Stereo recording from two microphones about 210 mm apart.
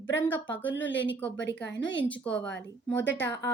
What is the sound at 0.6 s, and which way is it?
A woman's voice, 60° left (ahead or behind).